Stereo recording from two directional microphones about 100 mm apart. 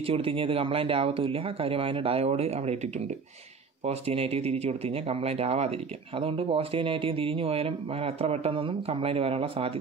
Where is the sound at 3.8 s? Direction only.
90° right.